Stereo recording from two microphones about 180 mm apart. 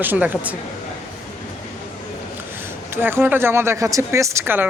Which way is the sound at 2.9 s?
10° right (ahead or behind).